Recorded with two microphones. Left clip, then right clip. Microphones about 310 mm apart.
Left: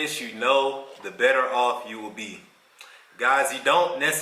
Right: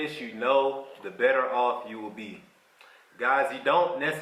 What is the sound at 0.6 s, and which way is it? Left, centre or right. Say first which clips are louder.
Speech: left 2 dB; right.